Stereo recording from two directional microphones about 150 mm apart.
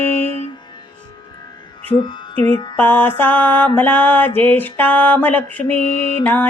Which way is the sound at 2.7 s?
10° left (ahead or behind).